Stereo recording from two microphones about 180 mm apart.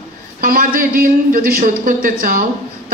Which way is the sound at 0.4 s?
50° right (ahead or behind).